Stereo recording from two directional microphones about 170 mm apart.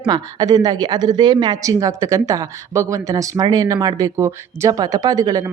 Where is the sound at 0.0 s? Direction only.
20° right (ahead or behind).